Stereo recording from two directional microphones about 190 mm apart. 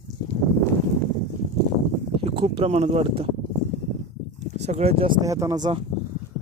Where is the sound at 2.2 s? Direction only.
30° right (ahead or behind).